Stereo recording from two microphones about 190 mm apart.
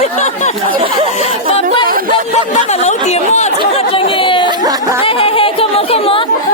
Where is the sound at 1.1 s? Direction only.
35° left (ahead or behind).